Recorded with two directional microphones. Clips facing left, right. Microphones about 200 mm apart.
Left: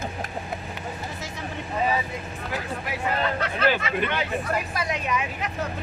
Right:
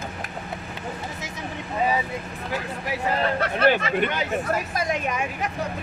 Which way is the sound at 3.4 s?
45° right (ahead or behind).